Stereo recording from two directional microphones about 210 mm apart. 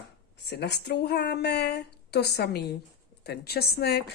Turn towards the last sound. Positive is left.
turn(degrees=50)  # may be behind; listen again after turning